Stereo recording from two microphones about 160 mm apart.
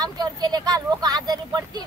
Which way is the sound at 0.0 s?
25° right (ahead or behind).